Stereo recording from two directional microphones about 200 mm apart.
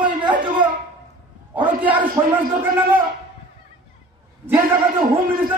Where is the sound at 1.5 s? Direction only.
10° right (ahead or behind).